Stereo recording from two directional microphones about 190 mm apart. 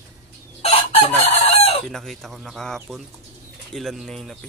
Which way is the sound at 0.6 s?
30° left (ahead or behind).